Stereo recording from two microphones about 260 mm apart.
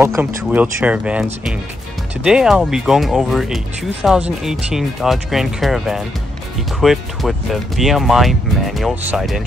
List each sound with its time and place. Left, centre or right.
0.0 s speech: centre